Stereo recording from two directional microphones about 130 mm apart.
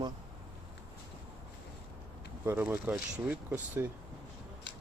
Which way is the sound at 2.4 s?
20° right (ahead or behind).